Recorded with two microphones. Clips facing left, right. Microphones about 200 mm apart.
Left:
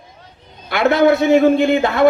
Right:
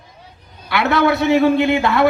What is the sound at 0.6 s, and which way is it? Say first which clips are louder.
Speech: left 3 dB; 50° left (ahead or behind).